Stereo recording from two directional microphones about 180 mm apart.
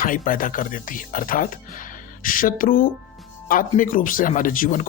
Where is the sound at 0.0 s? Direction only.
50° left (ahead or behind).